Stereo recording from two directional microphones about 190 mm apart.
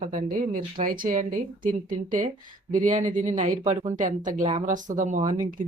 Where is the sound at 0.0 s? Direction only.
45° right (ahead or behind).